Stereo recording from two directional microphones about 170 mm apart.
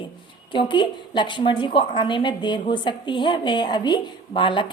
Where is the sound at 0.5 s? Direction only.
30° left (ahead or behind).